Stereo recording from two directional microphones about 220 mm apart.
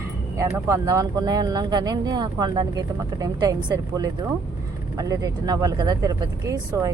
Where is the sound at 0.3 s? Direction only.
15° right (ahead or behind).